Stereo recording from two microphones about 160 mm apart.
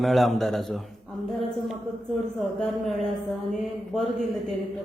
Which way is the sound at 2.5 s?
Centre (ahead or behind).